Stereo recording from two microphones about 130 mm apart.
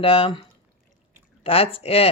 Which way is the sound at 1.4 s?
45° left (ahead or behind).